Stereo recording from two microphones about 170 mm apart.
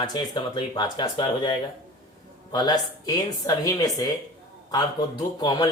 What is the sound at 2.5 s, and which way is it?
A man's voice, 25° left (ahead or behind).